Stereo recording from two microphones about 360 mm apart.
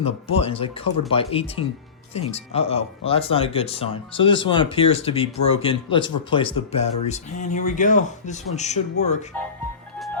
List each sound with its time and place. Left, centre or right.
0.0 s speech: centre